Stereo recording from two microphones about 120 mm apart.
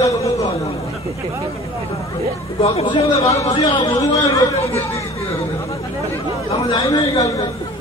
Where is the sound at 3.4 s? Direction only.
55° left (ahead or behind).